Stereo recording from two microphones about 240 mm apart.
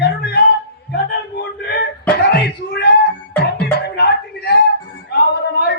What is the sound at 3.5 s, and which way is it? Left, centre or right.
Music, left.